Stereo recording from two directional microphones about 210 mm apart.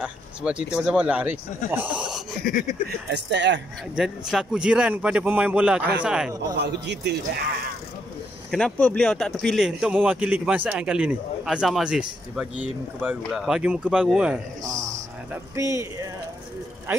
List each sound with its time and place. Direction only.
0.0 s speech: 5° right (ahead or behind)
2.4 s speech: 45° left (ahead or behind)
3.1 s speech: 55° right (ahead or behind)
3.9 s speech: centre (ahead or behind)
6.6 s a man's voice: 55° right (ahead or behind)
8.5 s speech: 5° left (ahead or behind)
14.6 s a sound: 15° right (ahead or behind)
15.5 s speech: 15° right (ahead or behind)